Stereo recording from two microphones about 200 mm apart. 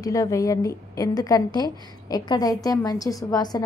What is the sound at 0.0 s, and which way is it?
A woman's voice, 15° left (ahead or behind).